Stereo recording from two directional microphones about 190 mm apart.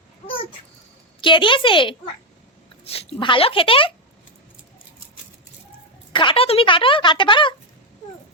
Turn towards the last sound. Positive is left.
turn(degrees=25)  # may be behind; listen again after turning